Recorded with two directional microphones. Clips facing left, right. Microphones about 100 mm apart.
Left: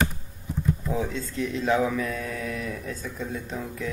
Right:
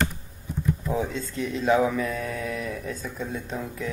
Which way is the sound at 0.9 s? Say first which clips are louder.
Right 1 dB; centre (ahead or behind).